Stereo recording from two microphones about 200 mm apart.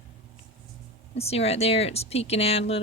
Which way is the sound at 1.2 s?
30° left (ahead or behind).